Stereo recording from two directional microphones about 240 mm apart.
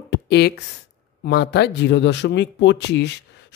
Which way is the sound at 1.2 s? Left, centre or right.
Left.